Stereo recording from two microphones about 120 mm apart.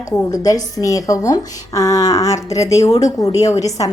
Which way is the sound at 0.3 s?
30° left (ahead or behind).